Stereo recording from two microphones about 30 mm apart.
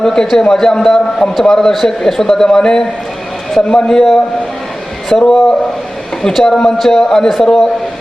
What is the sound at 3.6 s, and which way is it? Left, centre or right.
Speech, left.